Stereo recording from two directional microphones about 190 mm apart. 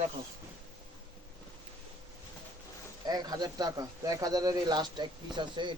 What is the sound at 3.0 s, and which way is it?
Speech, 20° right (ahead or behind).